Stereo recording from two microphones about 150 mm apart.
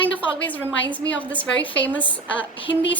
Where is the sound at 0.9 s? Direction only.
10° left (ahead or behind).